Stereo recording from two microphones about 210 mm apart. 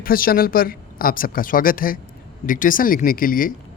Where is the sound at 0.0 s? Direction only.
45° left (ahead or behind).